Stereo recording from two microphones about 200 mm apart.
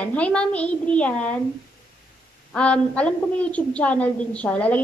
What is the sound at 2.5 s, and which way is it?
A woman's voice, 5° left (ahead or behind).